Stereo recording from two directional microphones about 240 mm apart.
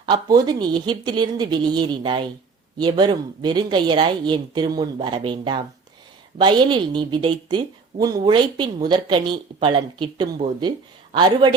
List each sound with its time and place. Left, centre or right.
0.0 s a woman's voice: centre